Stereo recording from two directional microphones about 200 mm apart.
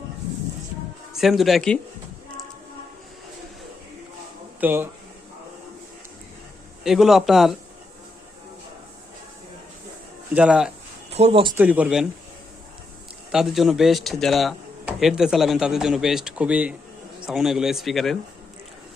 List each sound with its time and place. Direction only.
1.1 s speech: centre (ahead or behind)
4.6 s speech: 10° right (ahead or behind)
6.8 s speech: centre (ahead or behind)
10.3 s speech: 5° right (ahead or behind)
11.1 s speech: 30° right (ahead or behind)
11.5 s speech: 5° right (ahead or behind)
13.3 s speech: centre (ahead or behind)